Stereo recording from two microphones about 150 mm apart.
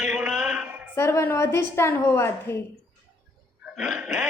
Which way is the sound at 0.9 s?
15° left (ahead or behind).